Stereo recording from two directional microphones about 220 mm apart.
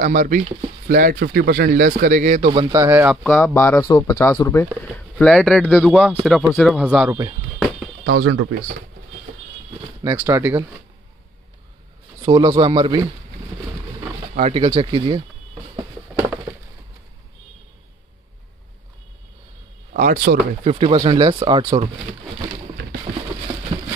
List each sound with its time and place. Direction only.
0.0 s speech: 40° right (ahead or behind); by 3.2 s 10° right (ahead or behind)
3.3 s speech: 10° left (ahead or behind)
8.0 s speech: 55° right (ahead or behind)
10.1 s speech: 10° right (ahead or behind)
12.2 s speech: 20° right (ahead or behind)
14.5 s speech: 20° right (ahead or behind)
19.9 s speech: 40° right (ahead or behind)
20.6 s speech: 25° right (ahead or behind)
23.1 s a sound: 45° right (ahead or behind)
23.7 s a sound: 25° right (ahead or behind)